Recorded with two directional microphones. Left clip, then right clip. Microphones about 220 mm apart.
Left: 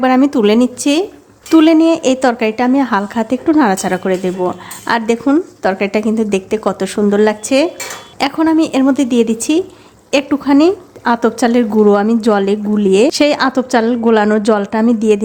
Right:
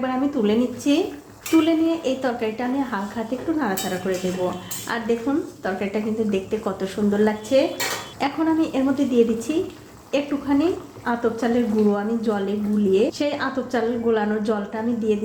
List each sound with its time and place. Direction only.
0.0 s a woman's voice: 45° left (ahead or behind)